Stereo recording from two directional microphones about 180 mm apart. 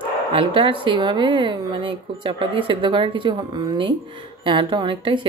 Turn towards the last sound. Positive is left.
turn(degrees=-25)  # may be behind; listen again after turning